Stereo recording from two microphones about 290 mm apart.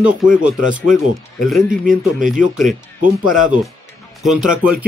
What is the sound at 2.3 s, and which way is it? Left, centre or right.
Speech, centre.